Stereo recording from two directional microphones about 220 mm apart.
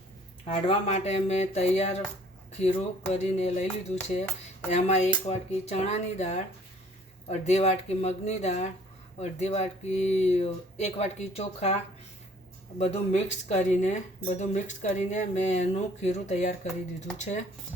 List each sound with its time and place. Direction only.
0.4 s speech: 30° left (ahead or behind)
12.8 s speech: 30° left (ahead or behind)